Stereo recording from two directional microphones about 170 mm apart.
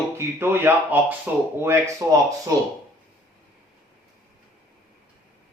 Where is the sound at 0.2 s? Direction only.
15° right (ahead or behind).